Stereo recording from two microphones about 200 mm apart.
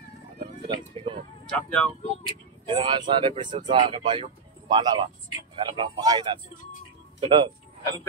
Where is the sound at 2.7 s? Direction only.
25° right (ahead or behind).